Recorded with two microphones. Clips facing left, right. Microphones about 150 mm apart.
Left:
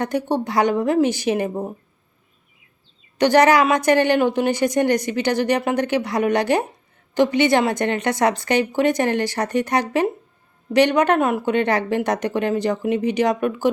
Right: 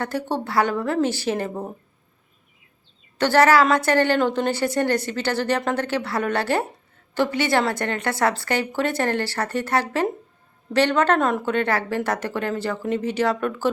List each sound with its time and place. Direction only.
0.0 s a woman's voice: 15° left (ahead or behind)
3.2 s a woman's voice: 15° left (ahead or behind)